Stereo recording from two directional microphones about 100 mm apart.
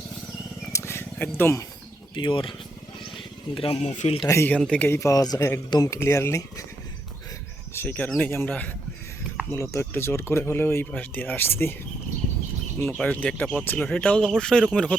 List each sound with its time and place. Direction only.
0.7 s wild animals: 25° left (ahead or behind)
1.4 s speech: 25° left (ahead or behind)
2.1 s speech: 55° left (ahead or behind)
3.5 s speech: 70° left (ahead or behind)
4.3 s speech: 25° left (ahead or behind)
4.5 s speech: 10° left (ahead or behind)
4.9 s speech: 30° left (ahead or behind)
7.7 s speech: 20° left (ahead or behind)
13.0 s speech: 10° left (ahead or behind)